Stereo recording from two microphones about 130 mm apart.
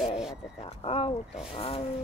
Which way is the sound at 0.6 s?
45° left (ahead or behind).